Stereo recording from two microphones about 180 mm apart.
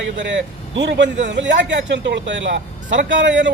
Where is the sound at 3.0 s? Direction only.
90° right.